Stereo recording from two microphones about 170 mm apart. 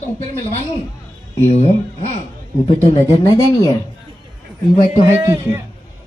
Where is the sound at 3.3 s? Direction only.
20° left (ahead or behind).